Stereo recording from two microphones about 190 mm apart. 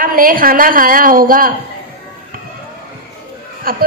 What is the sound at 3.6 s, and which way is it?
Speech, 50° right (ahead or behind).